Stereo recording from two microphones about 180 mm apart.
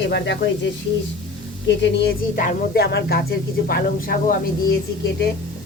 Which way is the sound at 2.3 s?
45° left (ahead or behind).